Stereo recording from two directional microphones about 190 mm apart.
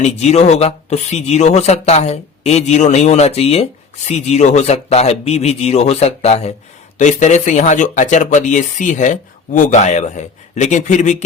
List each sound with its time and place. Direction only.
0.0 s speech: 35° left (ahead or behind)